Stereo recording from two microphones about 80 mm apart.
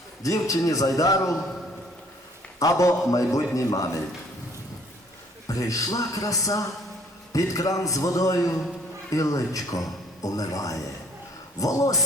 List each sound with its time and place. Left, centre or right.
0.2 s a man's voice: left
2.6 s a man's voice: left
5.5 s a man's voice: left